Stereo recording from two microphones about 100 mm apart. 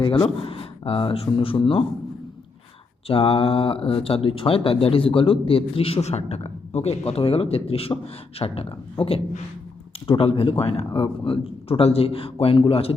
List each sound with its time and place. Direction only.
0.0 s speech: 60° left (ahead or behind)
3.1 s speech: 70° left (ahead or behind)